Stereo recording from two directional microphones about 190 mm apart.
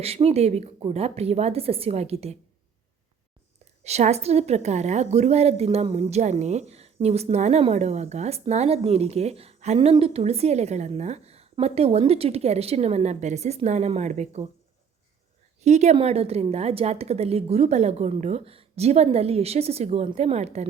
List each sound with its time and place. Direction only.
0.0 s a woman's voice: 30° right (ahead or behind)
3.8 s a woman's voice: 35° right (ahead or behind)
15.6 s a woman's voice: 35° right (ahead or behind)